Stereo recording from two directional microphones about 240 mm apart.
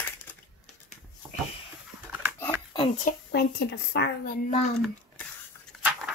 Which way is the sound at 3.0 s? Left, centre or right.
Left.